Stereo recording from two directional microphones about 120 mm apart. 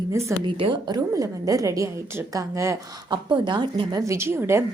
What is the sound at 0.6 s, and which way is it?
A woman's voice, 40° right (ahead or behind).